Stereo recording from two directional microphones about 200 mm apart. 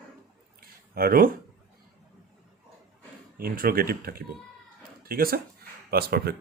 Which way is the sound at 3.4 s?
50° right (ahead or behind).